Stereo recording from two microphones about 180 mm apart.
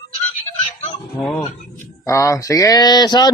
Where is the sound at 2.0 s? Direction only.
15° left (ahead or behind).